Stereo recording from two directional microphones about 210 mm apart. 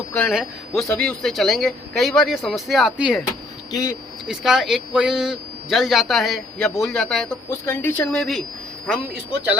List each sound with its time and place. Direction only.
0.1 s a man's voice: 5° left (ahead or behind)
3.7 s speech: 15° left (ahead or behind)
4.3 s a man's voice: 5° right (ahead or behind)